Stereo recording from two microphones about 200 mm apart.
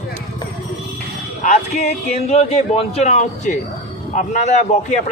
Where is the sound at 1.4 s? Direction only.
35° left (ahead or behind).